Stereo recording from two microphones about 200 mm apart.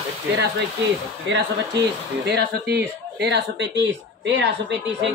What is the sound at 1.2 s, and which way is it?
Speech, 60° right (ahead or behind).